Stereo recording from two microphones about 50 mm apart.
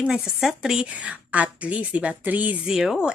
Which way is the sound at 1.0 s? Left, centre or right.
Right.